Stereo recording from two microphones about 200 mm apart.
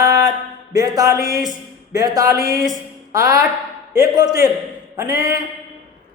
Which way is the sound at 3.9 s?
20° right (ahead or behind).